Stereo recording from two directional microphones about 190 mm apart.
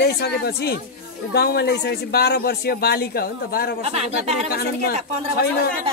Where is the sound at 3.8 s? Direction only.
35° right (ahead or behind).